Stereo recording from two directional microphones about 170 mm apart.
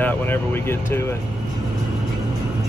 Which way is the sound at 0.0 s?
10° left (ahead or behind).